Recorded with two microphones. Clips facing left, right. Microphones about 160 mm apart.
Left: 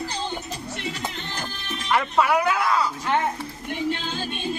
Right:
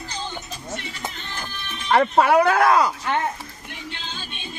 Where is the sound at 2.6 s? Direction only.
85° right.